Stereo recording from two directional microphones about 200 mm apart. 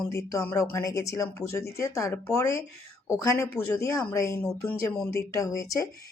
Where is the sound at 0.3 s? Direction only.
15° left (ahead or behind).